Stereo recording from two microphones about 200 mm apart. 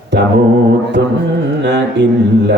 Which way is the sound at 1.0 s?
55° right (ahead or behind).